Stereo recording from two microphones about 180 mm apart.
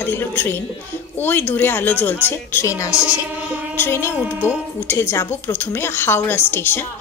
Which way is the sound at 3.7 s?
15° left (ahead or behind).